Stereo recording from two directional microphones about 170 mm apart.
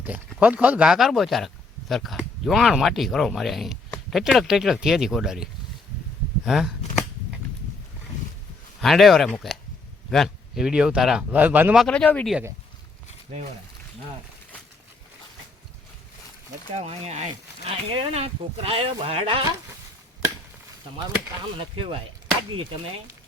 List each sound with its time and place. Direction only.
0.3 s speech: 10° right (ahead or behind)
8.8 s speech: centre (ahead or behind)
12.3 s speech: 10° right (ahead or behind)
16.7 s speech: 40° right (ahead or behind)
21.6 s speech: 35° right (ahead or behind)
22.5 s chop: 30° right (ahead or behind)